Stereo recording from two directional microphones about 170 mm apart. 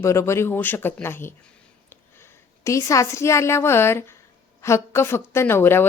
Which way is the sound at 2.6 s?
20° left (ahead or behind).